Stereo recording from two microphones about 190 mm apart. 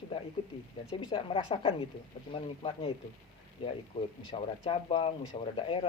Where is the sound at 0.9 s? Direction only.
25° left (ahead or behind).